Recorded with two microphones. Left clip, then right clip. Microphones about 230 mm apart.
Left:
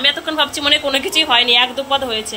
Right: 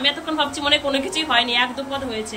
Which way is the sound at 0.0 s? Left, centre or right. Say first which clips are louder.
Left 5 dB; centre.